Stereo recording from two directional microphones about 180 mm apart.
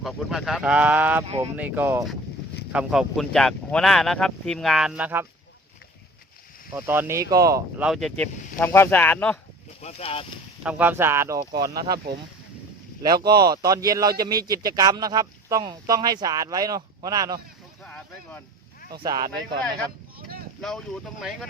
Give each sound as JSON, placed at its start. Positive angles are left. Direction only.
{"t": 0.0, "sound": "speech", "side_deg": 0}
{"t": 6.7, "sound": "speech", "side_deg": -10}
{"t": 7.8, "sound": "speech", "side_deg": 0}
{"t": 8.5, "sound": "speech", "side_deg": 15}
{"t": 9.8, "sound": "speech", "side_deg": 30}
{"t": 10.6, "sound": "speech", "side_deg": -10}
{"t": 13.0, "sound": "speech", "side_deg": -20}
{"t": 17.8, "sound": "speech", "side_deg": 10}
{"t": 18.9, "sound": "speech", "side_deg": -25}
{"t": 20.6, "sound": "speech", "side_deg": 5}